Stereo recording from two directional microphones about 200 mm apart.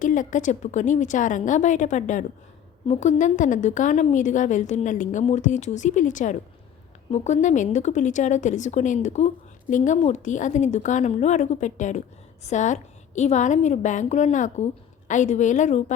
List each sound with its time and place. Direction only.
0.0 s a woman's voice: 40° left (ahead or behind)